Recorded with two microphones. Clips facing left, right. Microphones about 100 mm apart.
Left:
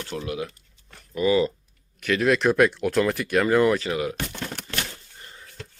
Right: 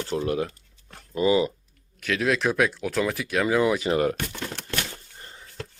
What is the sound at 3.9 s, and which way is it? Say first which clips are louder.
Speech: right 4 dB; 45° right (ahead or behind).